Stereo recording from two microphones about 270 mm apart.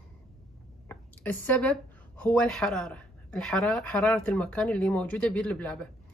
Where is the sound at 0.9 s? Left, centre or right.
Centre.